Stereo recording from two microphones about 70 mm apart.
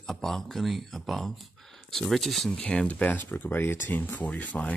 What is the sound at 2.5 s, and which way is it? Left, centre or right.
Speech, centre.